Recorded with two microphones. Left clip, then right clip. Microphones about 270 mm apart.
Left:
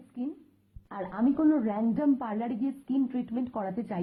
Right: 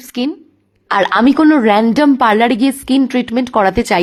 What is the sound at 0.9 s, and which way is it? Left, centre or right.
A woman's voice, right.